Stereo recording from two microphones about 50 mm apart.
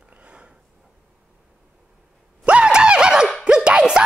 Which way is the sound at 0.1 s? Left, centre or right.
Right.